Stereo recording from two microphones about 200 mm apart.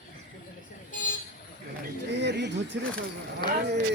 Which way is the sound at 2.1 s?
60° right (ahead or behind).